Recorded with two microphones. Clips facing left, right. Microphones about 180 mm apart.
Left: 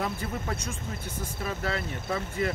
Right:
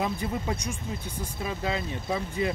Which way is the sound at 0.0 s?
15° right (ahead or behind).